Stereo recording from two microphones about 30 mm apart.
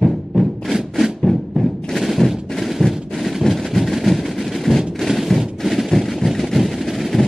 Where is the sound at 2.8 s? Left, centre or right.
Centre.